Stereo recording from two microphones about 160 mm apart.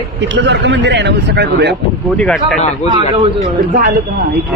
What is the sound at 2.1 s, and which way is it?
Speech, 5° left (ahead or behind).